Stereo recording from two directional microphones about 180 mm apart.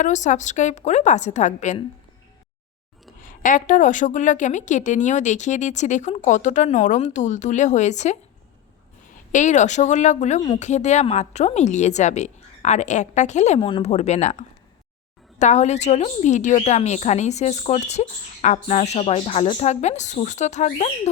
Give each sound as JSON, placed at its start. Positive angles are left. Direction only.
{"t": 0.0, "sound": "a woman's voice", "side_deg": 40}
{"t": 3.2, "sound": "a woman's voice", "side_deg": 50}
{"t": 9.3, "sound": "a woman's voice", "side_deg": 40}
{"t": 13.6, "sound": "a woman's voice", "side_deg": 30}